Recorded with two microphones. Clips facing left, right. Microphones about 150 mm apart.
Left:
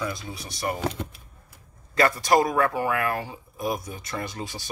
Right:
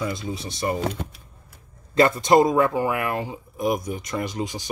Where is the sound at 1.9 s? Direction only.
25° right (ahead or behind).